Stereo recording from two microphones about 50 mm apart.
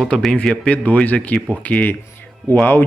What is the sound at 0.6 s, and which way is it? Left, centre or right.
Speech, left.